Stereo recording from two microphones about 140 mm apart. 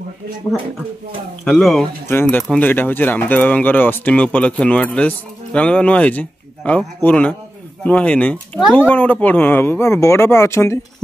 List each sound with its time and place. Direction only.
1.4 s speech: 5° left (ahead or behind)